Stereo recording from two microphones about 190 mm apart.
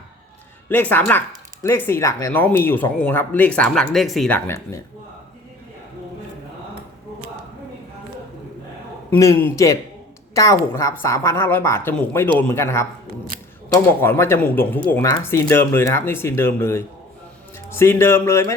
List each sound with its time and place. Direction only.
0.7 s speech: 10° left (ahead or behind)
9.0 s speech: 15° left (ahead or behind)